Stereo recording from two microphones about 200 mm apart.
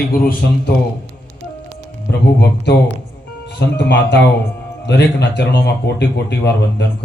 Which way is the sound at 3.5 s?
60° left (ahead or behind).